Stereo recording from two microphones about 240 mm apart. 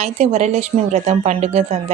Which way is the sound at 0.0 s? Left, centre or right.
Right.